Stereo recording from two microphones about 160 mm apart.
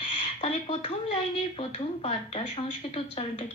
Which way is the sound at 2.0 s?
35° left (ahead or behind).